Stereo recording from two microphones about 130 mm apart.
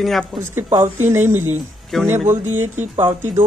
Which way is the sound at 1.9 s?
Centre (ahead or behind).